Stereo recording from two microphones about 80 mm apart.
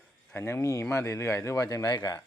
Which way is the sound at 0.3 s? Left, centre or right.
Left.